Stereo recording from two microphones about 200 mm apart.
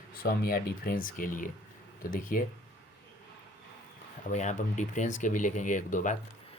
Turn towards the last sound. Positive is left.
turn(degrees=40)  # may be behind; listen again after turning